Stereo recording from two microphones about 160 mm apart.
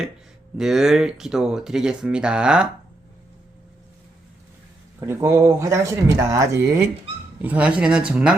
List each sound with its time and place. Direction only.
0.5 s speech: 5° right (ahead or behind)
4.9 s speech: 15° right (ahead or behind)